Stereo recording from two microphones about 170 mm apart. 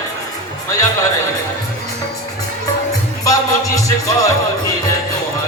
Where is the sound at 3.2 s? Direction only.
20° left (ahead or behind).